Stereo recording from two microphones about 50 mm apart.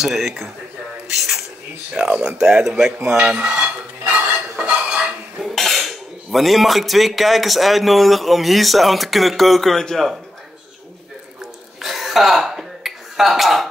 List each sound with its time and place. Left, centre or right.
0.0 s cutlery: centre
1.0 s speech: centre
2.0 s speech: centre
3.2 s cutlery: right
5.5 s cutlery: centre
11.8 s a sound: centre